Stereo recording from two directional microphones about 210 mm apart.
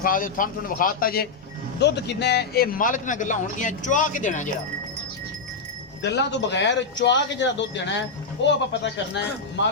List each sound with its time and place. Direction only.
0.0 s a man's voice: 40° left (ahead or behind)
6.0 s speech: 55° left (ahead or behind)